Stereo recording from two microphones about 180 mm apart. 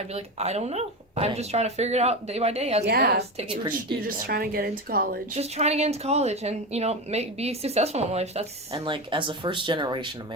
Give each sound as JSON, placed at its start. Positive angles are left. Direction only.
{"t": 0.1, "sound": "speech", "side_deg": -35}
{"t": 2.8, "sound": "speech", "side_deg": -55}
{"t": 3.3, "sound": "speech", "side_deg": -30}
{"t": 4.0, "sound": "speech", "side_deg": -55}
{"t": 5.4, "sound": "speech", "side_deg": -35}